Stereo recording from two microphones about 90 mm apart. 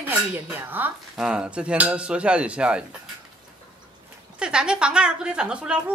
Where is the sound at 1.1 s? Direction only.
10° right (ahead or behind).